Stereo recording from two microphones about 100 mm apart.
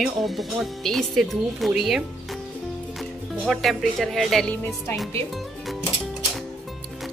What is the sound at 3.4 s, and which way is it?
Speech, centre (ahead or behind).